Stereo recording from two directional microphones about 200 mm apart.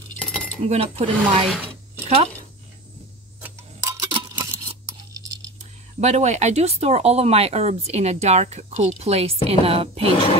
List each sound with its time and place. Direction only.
0.2 s keys jangling: 5° left (ahead or behind)
0.7 s speech: 30° right (ahead or behind)
1.5 s a sound: 10° right (ahead or behind)
3.3 s clock: 10° right (ahead or behind)
5.9 s speech: 35° right (ahead or behind)